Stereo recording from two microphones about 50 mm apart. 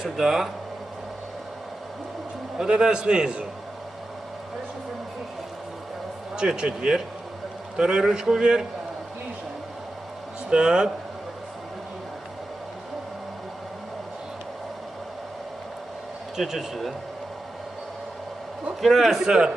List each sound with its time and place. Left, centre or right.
0.0 s speech: centre
2.6 s a man's voice: centre
6.3 s a man's voice: centre
10.5 s a man's voice: centre
16.3 s speech: centre
18.8 s a man's voice: centre